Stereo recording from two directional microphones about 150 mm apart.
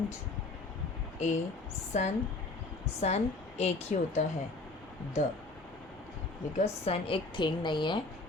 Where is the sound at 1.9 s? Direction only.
50° left (ahead or behind).